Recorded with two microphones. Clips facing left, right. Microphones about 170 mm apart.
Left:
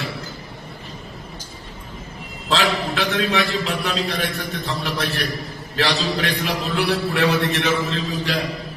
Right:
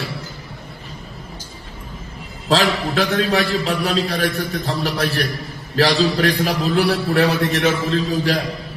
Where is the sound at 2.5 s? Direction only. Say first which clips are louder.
Right 3 dB; 35° right (ahead or behind).